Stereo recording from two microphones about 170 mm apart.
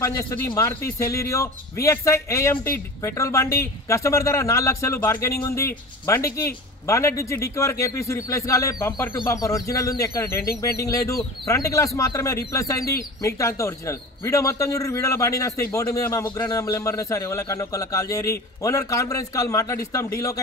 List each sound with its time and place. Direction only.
0.0 s a man's voice: 20° left (ahead or behind)